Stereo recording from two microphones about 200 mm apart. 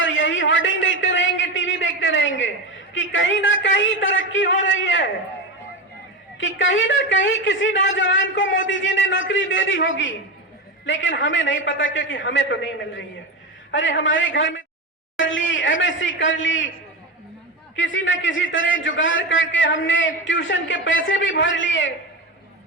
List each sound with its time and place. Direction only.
0.0 s a sound: 70° left (ahead or behind)
2.9 s a man's voice: 70° left (ahead or behind)
6.4 s a man's voice: 70° left (ahead or behind)
17.7 s a man's voice: 70° left (ahead or behind)